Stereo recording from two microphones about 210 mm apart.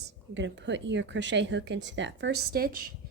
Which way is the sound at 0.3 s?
60° right (ahead or behind).